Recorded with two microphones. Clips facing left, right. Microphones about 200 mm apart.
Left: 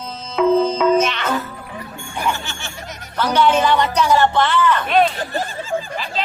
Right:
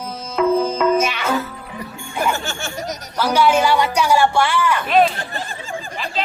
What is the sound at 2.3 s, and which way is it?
Speech, 45° right (ahead or behind).